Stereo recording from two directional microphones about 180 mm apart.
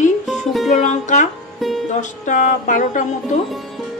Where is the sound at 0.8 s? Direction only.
40° left (ahead or behind).